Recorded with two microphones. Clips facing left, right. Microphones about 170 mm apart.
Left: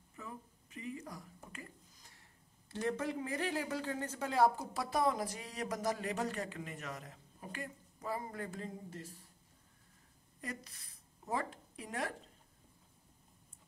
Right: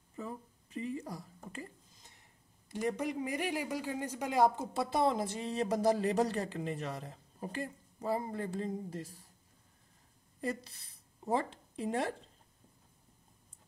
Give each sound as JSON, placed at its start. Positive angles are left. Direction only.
{"t": 0.1, "sound": "a sound", "side_deg": -35}
{"t": 2.7, "sound": "a man's voice", "side_deg": -15}
{"t": 10.4, "sound": "speech", "side_deg": -30}